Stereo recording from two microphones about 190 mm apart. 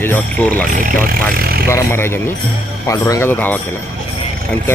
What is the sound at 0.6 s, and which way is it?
Speech, 45° right (ahead or behind).